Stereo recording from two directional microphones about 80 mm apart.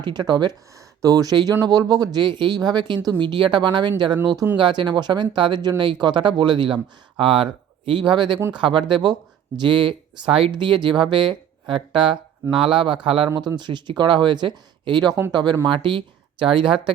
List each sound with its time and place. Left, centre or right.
0.0 s speech: right
0.8 s speech: right
3.1 s speech: right
4.5 s speech: right
7.2 s speech: right
8.5 s speech: right
9.6 s speech: right
11.7 s speech: right
13.6 s speech: right
15.6 s speech: right